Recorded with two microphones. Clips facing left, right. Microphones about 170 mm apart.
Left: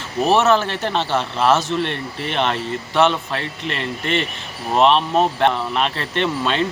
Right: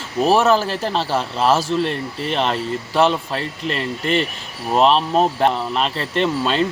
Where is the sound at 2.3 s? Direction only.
Centre (ahead or behind).